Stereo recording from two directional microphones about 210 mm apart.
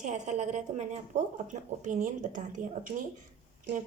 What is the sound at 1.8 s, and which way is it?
A woman's voice, 40° right (ahead or behind).